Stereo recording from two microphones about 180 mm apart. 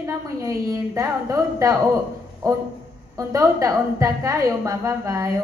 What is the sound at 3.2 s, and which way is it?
Speech, 20° right (ahead or behind).